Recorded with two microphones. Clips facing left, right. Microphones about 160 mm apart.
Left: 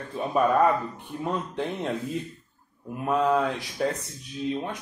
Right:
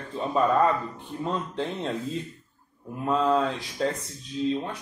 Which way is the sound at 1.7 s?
25° right (ahead or behind).